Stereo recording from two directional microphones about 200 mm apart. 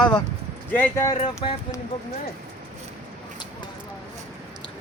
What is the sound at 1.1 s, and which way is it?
Speech, 30° left (ahead or behind).